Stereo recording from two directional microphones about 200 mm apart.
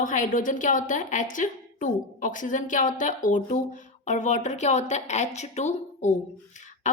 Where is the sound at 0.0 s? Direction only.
40° left (ahead or behind).